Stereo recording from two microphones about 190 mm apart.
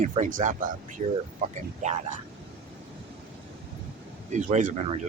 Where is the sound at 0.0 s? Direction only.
40° right (ahead or behind).